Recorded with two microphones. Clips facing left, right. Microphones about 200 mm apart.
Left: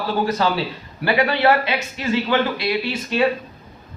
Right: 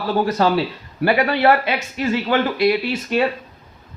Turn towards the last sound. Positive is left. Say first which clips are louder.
# right 2 dB
turn(degrees=-45)  # may be behind; listen again after turning